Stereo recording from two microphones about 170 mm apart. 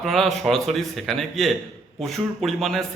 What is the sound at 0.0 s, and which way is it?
A man's voice, centre (ahead or behind).